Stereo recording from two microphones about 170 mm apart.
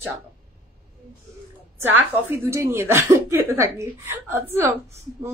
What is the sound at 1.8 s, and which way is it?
A woman's voice, 15° right (ahead or behind).